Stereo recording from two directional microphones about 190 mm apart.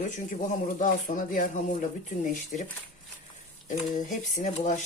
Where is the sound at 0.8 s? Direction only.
45° left (ahead or behind).